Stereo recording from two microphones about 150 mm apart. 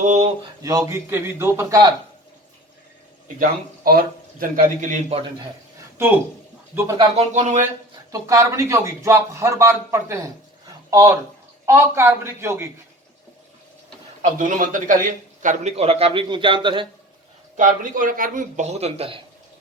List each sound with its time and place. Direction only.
0.0 s a sound: 55° right (ahead or behind)
0.4 s a man's voice: 25° right (ahead or behind)
3.4 s a man's voice: 75° right (ahead or behind); by 5.2 s 50° right (ahead or behind)
6.7 s a man's voice: 25° right (ahead or behind)
7.2 s a man's voice: 50° right (ahead or behind)
8.1 s a man's voice: 20° right (ahead or behind)
14.2 s a man's voice: 55° right (ahead or behind)
15.7 s a man's voice: 40° right (ahead or behind)
17.6 s a man's voice: 65° right (ahead or behind); by 19.2 s 40° right (ahead or behind)